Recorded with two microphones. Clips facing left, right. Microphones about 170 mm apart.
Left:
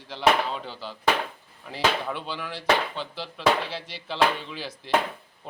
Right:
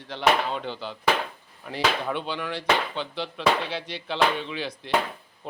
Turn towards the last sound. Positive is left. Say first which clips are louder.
# right 4 dB
turn(degrees=5)  # may be behind; listen again after turning